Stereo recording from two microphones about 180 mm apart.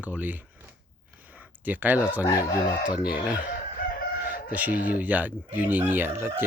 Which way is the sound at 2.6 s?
25° left (ahead or behind).